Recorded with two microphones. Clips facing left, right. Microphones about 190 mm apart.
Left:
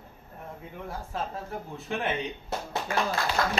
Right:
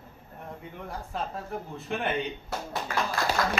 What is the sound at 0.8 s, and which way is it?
Speech, centre (ahead or behind).